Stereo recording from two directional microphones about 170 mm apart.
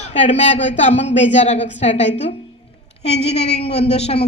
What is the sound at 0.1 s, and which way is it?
A woman's voice, 40° left (ahead or behind).